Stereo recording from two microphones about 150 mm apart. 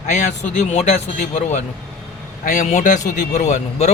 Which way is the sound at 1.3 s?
50° left (ahead or behind).